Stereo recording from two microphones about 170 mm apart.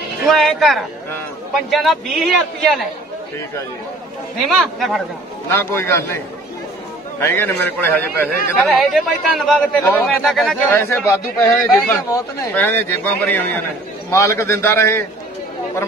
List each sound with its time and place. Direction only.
0.3 s a man's voice: centre (ahead or behind)
4.5 s a man's voice: centre (ahead or behind)
5.5 s a man's voice: 15° left (ahead or behind)
7.2 s a man's voice: 15° left (ahead or behind)
8.6 s a man's voice: centre (ahead or behind)
10.7 s a man's voice: 15° left (ahead or behind)